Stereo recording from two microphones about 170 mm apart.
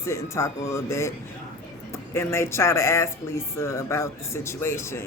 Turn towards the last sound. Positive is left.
turn(degrees=15)  # may be behind; listen again after turning